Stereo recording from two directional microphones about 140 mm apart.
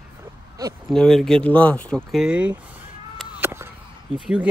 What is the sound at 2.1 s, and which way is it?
Speech, 5° right (ahead or behind).